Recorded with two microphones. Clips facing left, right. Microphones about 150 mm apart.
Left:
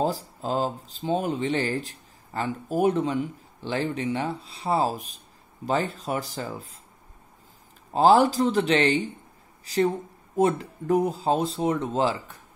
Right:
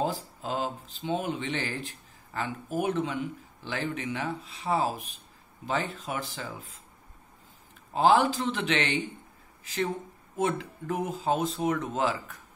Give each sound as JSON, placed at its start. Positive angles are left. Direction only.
{"t": 0.0, "sound": "speech", "side_deg": 35}
{"t": 7.9, "sound": "speech", "side_deg": 35}
{"t": 10.3, "sound": "speech", "side_deg": 40}